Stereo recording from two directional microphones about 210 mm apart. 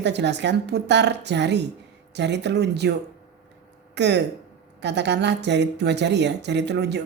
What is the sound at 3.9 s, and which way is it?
A woman's voice, 55° right (ahead or behind).